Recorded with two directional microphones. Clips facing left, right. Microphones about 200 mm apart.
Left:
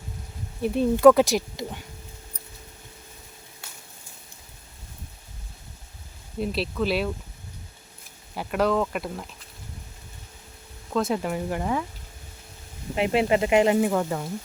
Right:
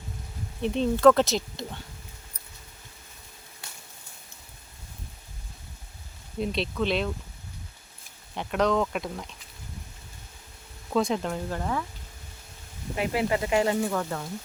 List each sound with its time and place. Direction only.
0.6 s speech: 10° left (ahead or behind)
6.4 s speech: 5° left (ahead or behind)
8.4 s speech: 5° left (ahead or behind)
10.9 s speech: 5° left (ahead or behind)
13.0 s speech: 25° left (ahead or behind)